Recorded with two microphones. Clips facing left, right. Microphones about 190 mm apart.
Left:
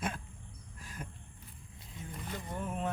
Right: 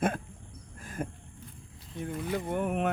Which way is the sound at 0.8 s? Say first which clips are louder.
Right 10 dB; 50° right (ahead or behind).